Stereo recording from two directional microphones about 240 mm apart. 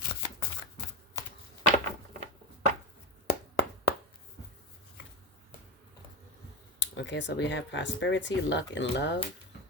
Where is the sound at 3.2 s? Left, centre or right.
Left.